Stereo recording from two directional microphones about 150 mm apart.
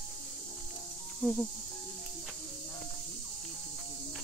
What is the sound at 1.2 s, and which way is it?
Cricket, 5° left (ahead or behind).